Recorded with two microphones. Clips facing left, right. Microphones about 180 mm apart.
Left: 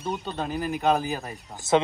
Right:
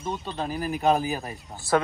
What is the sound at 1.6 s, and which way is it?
Speech, 20° left (ahead or behind).